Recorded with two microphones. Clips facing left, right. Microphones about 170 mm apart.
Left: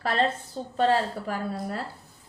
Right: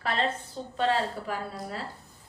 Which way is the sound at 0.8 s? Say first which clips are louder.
Left 4 dB; 45° left (ahead or behind).